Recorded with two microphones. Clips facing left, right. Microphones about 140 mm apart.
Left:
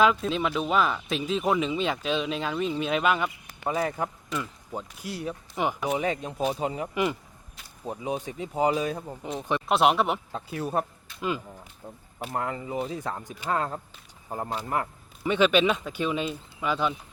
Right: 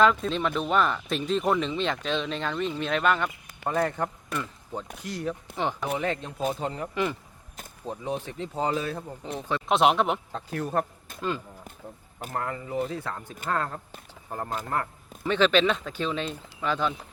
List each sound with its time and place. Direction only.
0.0 s speech: 5° left (ahead or behind)
9.6 s speech: centre (ahead or behind)
12.3 s speech: 20° left (ahead or behind)